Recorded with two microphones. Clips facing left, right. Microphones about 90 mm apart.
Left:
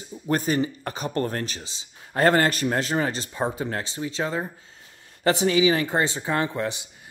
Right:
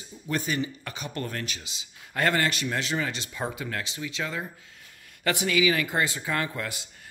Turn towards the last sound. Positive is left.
turn(degrees=25)  # may be behind; listen again after turning